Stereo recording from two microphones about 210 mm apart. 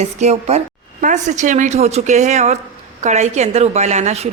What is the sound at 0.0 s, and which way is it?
A woman's voice, 30° right (ahead or behind).